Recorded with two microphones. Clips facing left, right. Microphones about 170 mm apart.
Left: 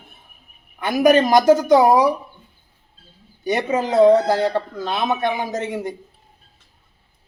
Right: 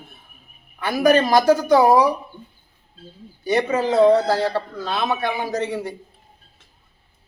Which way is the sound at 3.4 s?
20° left (ahead or behind).